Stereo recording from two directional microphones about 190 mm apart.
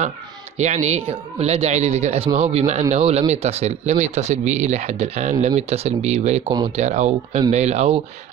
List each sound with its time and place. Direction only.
0.6 s speech: 35° right (ahead or behind)